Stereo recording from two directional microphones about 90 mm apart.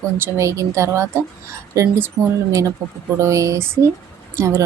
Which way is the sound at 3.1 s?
35° right (ahead or behind).